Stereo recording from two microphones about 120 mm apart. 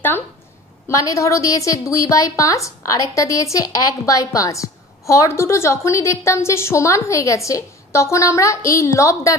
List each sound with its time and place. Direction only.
0.8 s a woman's voice: 25° left (ahead or behind)